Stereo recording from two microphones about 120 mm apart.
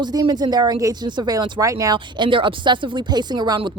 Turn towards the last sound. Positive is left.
turn(degrees=-35)  # may be behind; listen again after turning